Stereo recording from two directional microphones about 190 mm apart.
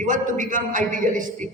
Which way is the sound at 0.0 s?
45° right (ahead or behind).